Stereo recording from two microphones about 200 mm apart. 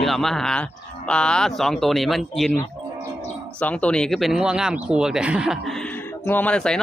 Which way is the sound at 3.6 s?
5° left (ahead or behind).